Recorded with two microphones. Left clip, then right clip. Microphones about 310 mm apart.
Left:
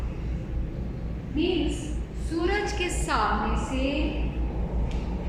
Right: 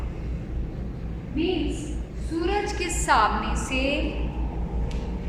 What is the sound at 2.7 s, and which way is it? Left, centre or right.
Speech, centre.